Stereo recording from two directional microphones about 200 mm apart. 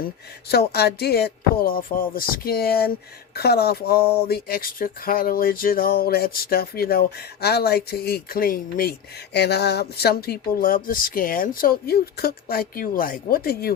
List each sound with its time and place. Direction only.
0.4 s speech: 55° left (ahead or behind)